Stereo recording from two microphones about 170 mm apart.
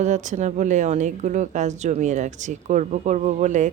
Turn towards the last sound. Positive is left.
turn(degrees=-45)  # may be behind; listen again after turning